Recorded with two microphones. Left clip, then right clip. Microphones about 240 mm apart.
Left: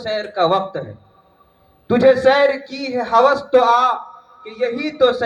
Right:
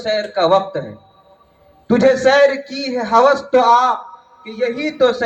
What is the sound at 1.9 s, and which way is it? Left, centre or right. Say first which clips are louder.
A man's voice: right 1 dB; left.